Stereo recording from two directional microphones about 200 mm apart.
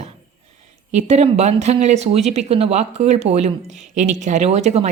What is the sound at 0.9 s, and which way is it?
Speech, 35° right (ahead or behind).